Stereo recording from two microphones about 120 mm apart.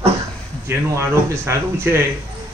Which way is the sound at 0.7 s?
25° right (ahead or behind).